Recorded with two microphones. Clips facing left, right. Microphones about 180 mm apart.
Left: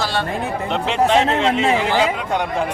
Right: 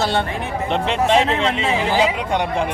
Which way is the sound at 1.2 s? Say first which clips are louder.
Left 1 dB; 40° left (ahead or behind).